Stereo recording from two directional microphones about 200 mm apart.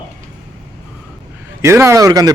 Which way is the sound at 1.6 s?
15° right (ahead or behind).